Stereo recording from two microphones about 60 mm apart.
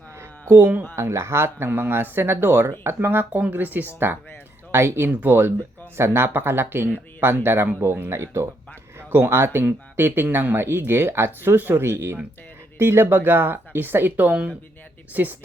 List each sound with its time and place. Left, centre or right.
0.2 s a sound: right
0.9 s speech: right
9.0 s speech: right